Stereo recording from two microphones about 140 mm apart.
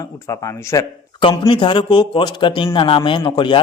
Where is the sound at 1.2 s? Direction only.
35° left (ahead or behind).